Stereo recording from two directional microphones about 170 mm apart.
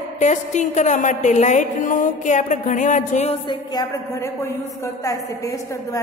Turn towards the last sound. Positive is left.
turn(degrees=20)  # may be behind; listen again after turning